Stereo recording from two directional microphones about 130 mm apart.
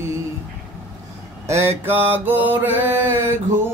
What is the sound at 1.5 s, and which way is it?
Mantra, 20° right (ahead or behind).